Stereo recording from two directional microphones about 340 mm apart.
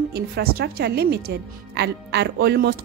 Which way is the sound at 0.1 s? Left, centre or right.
Right.